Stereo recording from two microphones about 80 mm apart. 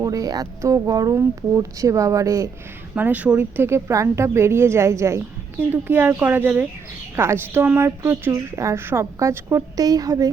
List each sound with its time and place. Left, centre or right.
0.0 s speech: right
2.9 s a woman's voice: right
5.5 s speech: right
7.2 s a woman's voice: right